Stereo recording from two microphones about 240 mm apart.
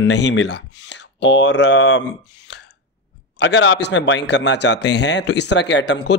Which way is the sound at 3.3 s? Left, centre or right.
Left.